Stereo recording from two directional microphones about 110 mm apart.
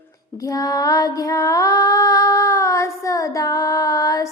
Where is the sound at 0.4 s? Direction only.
35° left (ahead or behind).